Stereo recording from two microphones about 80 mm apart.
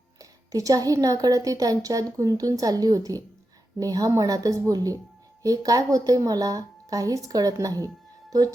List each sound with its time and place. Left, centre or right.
0.2 s a woman's voice: right